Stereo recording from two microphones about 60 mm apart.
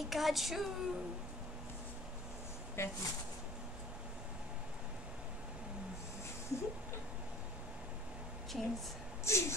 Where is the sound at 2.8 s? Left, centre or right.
Left.